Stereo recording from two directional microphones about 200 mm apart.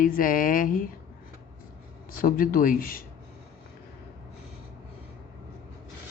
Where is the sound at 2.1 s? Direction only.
45° left (ahead or behind).